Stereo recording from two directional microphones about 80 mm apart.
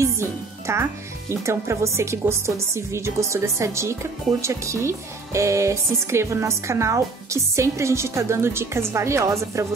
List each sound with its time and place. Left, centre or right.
0.0 s speech: right